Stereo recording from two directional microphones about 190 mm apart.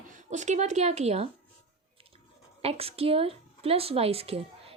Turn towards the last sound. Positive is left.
turn(degrees=-30)  # may be behind; listen again after turning